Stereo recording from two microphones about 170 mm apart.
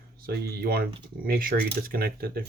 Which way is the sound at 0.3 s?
65° right (ahead or behind).